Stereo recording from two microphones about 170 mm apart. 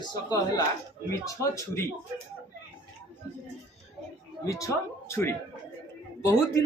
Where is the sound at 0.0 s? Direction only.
25° left (ahead or behind).